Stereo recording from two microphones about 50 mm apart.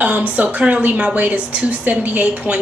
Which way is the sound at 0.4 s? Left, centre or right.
Right.